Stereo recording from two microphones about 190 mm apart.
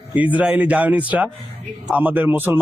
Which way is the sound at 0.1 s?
10° right (ahead or behind).